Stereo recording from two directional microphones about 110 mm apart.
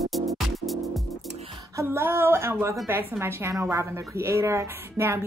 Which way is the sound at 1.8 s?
20° right (ahead or behind).